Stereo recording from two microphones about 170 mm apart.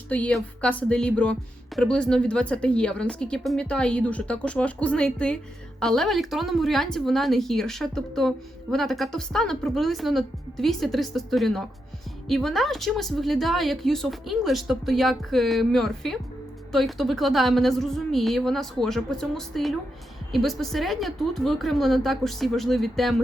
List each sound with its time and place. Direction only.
0.1 s speech: 5° left (ahead or behind)